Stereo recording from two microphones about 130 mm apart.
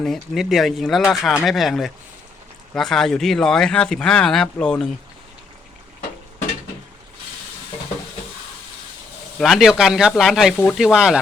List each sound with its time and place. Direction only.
0.0 s speech: centre (ahead or behind)
9.4 s speech: centre (ahead or behind)